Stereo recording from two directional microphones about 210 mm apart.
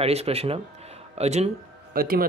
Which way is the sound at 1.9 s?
45° right (ahead or behind).